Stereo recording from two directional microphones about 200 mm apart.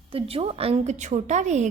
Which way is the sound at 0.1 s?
30° right (ahead or behind).